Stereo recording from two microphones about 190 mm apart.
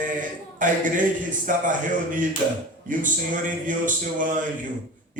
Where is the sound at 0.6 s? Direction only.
45° right (ahead or behind).